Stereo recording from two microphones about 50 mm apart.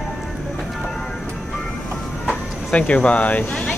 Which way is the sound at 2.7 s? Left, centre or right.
Left.